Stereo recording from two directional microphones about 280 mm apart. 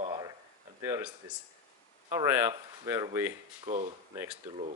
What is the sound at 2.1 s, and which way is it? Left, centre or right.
Speech, centre.